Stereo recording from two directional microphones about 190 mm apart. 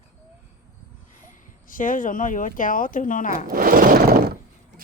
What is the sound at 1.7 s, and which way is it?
Speech, 45° left (ahead or behind).